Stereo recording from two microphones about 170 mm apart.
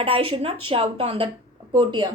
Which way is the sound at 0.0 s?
30° right (ahead or behind).